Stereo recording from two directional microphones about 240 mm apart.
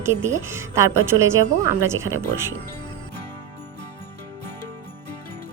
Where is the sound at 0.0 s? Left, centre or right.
Centre.